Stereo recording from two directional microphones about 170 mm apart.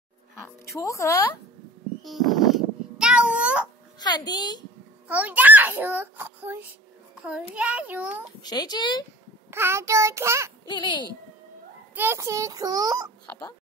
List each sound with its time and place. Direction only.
0.7 s speech: 20° left (ahead or behind)
2.0 s a sound: centre (ahead or behind)
4.0 s speech: 25° left (ahead or behind)
5.0 s a child's voice: 10° right (ahead or behind)
8.4 s speech: 25° left (ahead or behind)
9.5 s a child's voice: 15° right (ahead or behind)
10.7 s speech: 25° left (ahead or behind)
11.9 s a child's voice: 15° right (ahead or behind)